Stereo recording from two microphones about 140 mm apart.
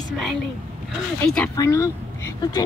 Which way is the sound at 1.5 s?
25° left (ahead or behind).